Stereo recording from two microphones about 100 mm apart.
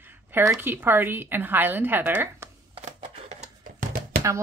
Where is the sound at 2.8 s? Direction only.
90° right.